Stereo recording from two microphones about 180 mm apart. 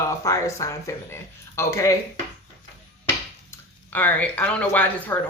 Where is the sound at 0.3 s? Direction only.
15° left (ahead or behind).